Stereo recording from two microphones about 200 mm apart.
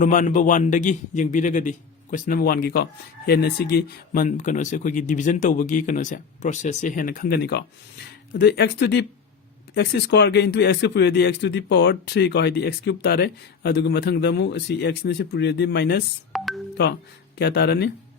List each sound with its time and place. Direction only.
0.0 s a man's voice: 40° left (ahead or behind)
16.3 s music: centre (ahead or behind)
17.3 s speech: 55° left (ahead or behind)